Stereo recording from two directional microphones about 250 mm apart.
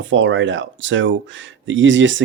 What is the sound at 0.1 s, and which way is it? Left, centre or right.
Speech, right.